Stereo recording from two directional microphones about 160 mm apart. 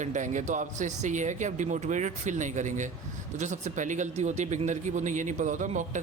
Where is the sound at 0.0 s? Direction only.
50° right (ahead or behind).